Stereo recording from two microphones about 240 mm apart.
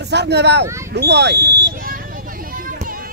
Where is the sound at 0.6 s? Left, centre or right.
Centre.